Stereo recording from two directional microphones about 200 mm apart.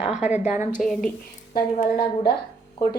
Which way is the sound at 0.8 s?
Centre (ahead or behind).